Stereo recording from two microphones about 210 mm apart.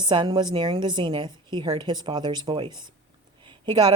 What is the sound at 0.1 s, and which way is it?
Speech, 20° right (ahead or behind).